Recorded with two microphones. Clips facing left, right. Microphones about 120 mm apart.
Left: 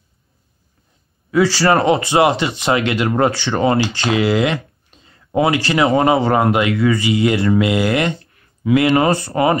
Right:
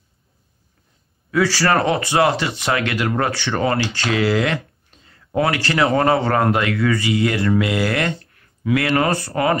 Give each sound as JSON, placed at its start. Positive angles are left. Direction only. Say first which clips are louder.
{"t": 1.3, "sound": "speech", "louder": "left 3 dB", "side_deg": 25}